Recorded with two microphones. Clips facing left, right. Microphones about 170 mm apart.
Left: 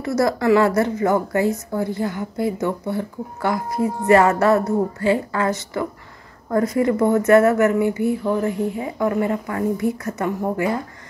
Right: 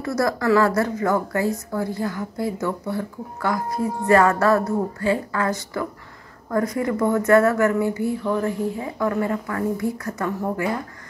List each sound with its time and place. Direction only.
0.0 s speech: 25° left (ahead or behind)